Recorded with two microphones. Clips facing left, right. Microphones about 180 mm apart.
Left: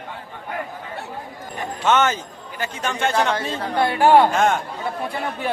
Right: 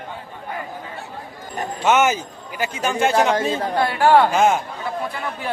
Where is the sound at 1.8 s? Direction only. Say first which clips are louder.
Right 2 dB; 10° right (ahead or behind).